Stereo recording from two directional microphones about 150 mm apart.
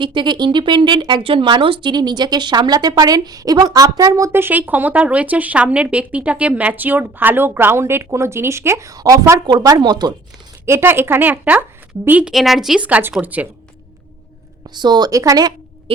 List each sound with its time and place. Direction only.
0.0 s a woman's voice: 30° right (ahead or behind)
10.7 s a woman's voice: 15° right (ahead or behind)
14.7 s a woman's voice: 30° right (ahead or behind)